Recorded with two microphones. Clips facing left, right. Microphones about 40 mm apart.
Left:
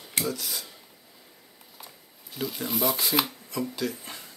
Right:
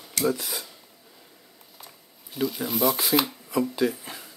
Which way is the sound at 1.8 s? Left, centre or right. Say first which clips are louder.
Left 1 dB; centre.